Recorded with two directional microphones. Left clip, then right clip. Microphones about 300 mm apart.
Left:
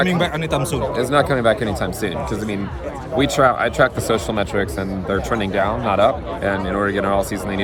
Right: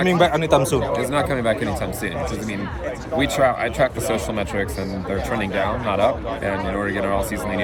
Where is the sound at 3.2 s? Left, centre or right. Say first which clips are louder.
Left 3 dB; centre.